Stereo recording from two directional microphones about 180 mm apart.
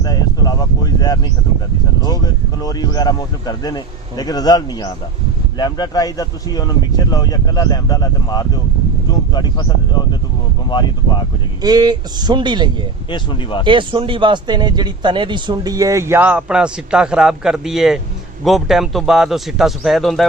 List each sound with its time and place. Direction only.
0.0 s a sound: 20° left (ahead or behind)
2.0 s speech: 20° left (ahead or behind)
11.6 s speech: 20° right (ahead or behind)
13.1 s speech: 25° left (ahead or behind)
13.7 s speech: 25° right (ahead or behind); by 20.2 s centre (ahead or behind)